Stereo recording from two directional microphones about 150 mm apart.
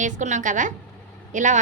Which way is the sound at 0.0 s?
55° right (ahead or behind).